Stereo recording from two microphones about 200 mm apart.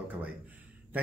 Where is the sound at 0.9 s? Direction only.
10° right (ahead or behind).